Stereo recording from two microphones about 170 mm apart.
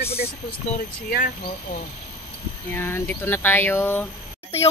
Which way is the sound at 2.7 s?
15° left (ahead or behind).